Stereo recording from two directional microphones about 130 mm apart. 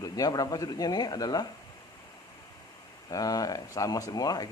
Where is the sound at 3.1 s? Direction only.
30° left (ahead or behind).